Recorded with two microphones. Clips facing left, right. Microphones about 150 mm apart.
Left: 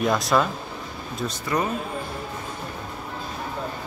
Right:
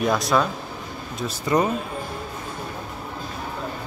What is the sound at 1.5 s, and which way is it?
Speech, 20° right (ahead or behind).